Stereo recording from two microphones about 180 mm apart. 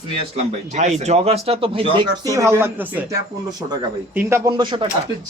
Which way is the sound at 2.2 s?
15° right (ahead or behind).